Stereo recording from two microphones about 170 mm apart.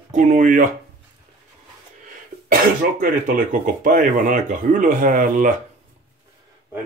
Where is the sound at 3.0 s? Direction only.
55° right (ahead or behind).